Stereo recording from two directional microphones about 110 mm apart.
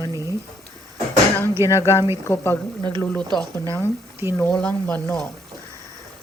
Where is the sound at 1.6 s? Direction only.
25° left (ahead or behind).